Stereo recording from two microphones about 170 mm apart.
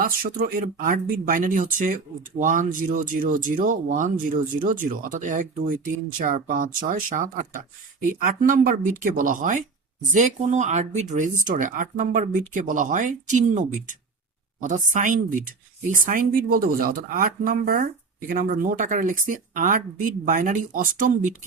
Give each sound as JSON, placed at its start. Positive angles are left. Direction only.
{"t": 0.0, "sound": "speech", "side_deg": -55}